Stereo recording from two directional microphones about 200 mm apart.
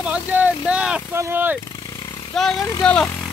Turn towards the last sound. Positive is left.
turn(degrees=5)  # may be behind; listen again after turning